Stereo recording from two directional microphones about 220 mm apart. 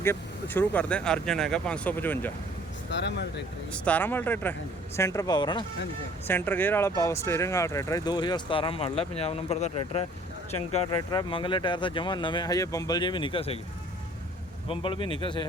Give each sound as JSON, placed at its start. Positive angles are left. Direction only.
{"t": 0.0, "sound": "speech", "side_deg": 10}
{"t": 2.9, "sound": "speech", "side_deg": 50}
{"t": 3.7, "sound": "speech", "side_deg": 5}
{"t": 6.2, "sound": "speech", "side_deg": 10}
{"t": 14.7, "sound": "speech", "side_deg": 25}